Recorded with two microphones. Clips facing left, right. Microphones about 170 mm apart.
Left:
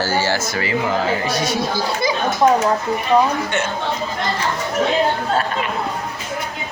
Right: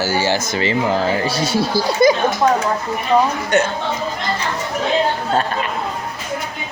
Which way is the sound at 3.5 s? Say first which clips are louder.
Right 6 dB; 40° right (ahead or behind).